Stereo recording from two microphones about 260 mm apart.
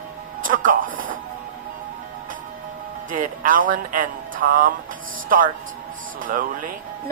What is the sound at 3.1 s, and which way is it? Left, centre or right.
Speech, right.